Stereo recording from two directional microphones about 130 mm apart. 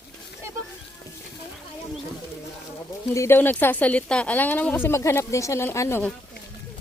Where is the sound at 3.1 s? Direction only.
20° left (ahead or behind).